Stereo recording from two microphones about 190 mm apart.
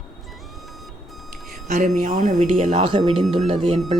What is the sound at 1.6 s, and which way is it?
Speech, 40° right (ahead or behind).